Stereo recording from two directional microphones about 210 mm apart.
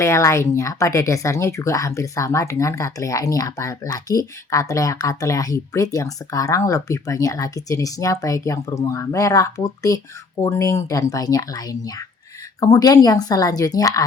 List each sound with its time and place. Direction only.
0.0 s speech: 15° left (ahead or behind)